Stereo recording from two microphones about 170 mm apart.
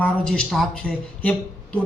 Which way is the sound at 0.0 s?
5° left (ahead or behind).